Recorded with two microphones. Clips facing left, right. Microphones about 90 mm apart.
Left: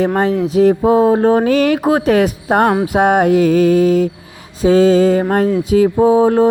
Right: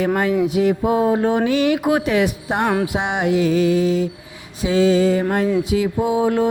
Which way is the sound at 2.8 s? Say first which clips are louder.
Left 8 dB; 45° left (ahead or behind).